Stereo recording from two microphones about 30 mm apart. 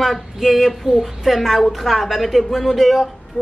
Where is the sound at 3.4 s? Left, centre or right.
Left.